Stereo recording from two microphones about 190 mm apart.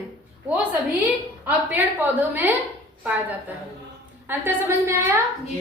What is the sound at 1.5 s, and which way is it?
A woman's voice, 10° right (ahead or behind).